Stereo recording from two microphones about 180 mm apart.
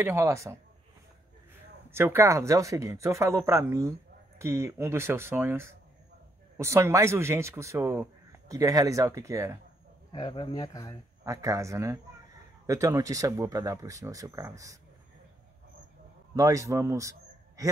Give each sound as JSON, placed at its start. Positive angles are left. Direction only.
{"t": 0.0, "sound": "speech", "side_deg": -15}
{"t": 1.9, "sound": "speech", "side_deg": -15}
{"t": 10.1, "sound": "speech", "side_deg": 25}
{"t": 11.2, "sound": "speech", "side_deg": -20}
{"t": 16.3, "sound": "a man's voice", "side_deg": -20}